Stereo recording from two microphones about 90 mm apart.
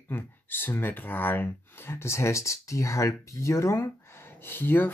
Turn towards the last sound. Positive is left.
turn(degrees=20)  # may be behind; listen again after turning